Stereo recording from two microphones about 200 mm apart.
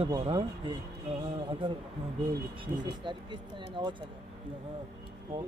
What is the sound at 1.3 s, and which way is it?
Speech, 25° right (ahead or behind).